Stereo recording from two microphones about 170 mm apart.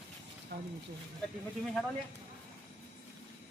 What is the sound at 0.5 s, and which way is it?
Speech, 75° right (ahead or behind).